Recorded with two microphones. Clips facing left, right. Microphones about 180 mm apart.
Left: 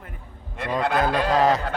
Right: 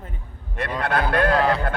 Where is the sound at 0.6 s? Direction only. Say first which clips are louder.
Left 1 dB; 60° right (ahead or behind).